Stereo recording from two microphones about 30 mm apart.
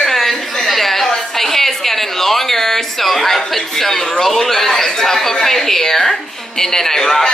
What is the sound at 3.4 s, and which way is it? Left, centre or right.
Speech, centre.